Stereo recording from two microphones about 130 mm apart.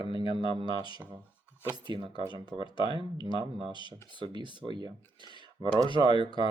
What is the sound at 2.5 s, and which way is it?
Speech, 40° left (ahead or behind).